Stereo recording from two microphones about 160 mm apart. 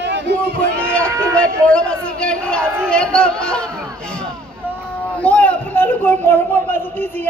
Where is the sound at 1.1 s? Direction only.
20° right (ahead or behind).